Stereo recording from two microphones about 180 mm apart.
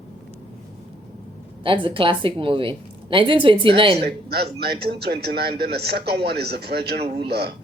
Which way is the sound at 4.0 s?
65° right (ahead or behind).